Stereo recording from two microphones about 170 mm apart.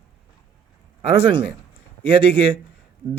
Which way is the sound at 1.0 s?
30° right (ahead or behind).